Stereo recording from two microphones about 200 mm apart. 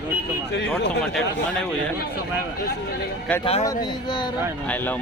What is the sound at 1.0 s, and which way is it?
Speech, 5° left (ahead or behind).